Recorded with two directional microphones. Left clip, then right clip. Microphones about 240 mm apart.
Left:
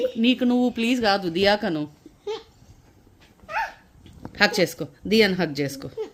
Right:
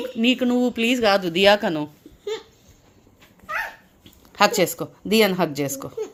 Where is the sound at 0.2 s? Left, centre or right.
Centre.